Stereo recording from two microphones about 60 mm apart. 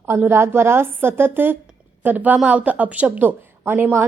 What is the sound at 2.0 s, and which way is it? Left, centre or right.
A woman's voice, right.